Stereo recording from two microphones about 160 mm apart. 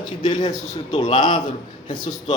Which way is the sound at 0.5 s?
45° left (ahead or behind).